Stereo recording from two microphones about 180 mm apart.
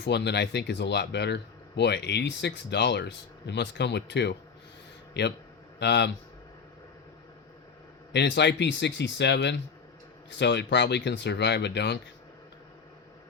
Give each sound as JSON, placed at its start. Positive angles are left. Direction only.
{"t": 0.0, "sound": "speech", "side_deg": 75}
{"t": 8.1, "sound": "speech", "side_deg": 75}